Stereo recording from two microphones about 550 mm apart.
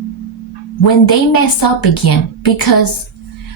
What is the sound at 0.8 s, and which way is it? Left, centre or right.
A woman's voice, left.